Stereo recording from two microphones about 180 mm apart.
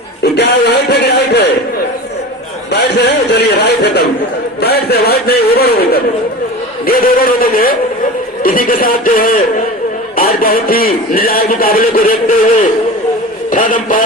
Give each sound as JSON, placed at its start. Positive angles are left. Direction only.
{"t": 0.2, "sound": "a sound", "side_deg": 65}
{"t": 2.7, "sound": "a man's voice", "side_deg": 65}
{"t": 13.5, "sound": "a man's voice", "side_deg": 45}